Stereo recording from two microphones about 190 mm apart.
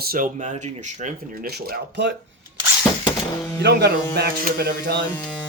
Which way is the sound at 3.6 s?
60° right (ahead or behind).